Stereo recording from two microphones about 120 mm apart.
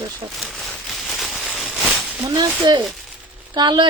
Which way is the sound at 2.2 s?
35° right (ahead or behind).